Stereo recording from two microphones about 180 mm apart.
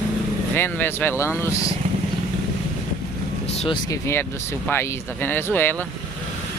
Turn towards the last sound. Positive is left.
turn(degrees=10)  # may be behind; listen again after turning